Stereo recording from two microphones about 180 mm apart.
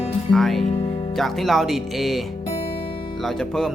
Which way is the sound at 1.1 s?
Centre (ahead or behind).